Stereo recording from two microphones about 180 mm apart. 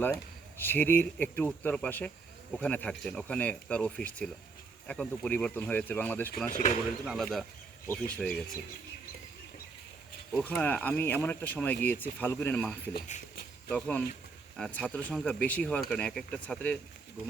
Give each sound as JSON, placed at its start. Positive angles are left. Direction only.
{"t": 0.6, "sound": "speech", "side_deg": 10}
{"t": 6.5, "sound": "speech", "side_deg": 45}
{"t": 7.0, "sound": "speech", "side_deg": 0}
{"t": 10.3, "sound": "speech", "side_deg": 10}